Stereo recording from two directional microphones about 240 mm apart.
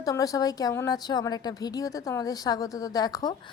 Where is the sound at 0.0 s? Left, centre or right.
Centre.